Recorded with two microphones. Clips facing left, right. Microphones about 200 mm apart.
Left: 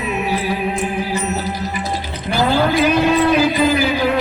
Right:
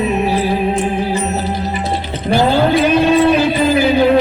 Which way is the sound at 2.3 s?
30° right (ahead or behind).